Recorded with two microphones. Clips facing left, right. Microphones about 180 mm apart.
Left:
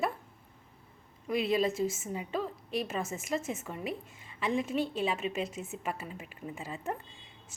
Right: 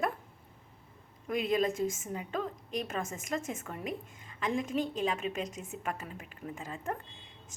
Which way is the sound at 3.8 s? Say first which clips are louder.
Left 1 dB; 45° right (ahead or behind).